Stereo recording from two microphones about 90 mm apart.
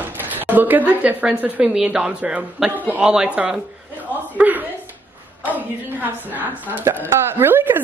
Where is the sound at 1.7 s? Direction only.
10° right (ahead or behind).